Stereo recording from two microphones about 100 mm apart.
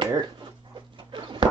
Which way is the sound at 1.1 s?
55° right (ahead or behind).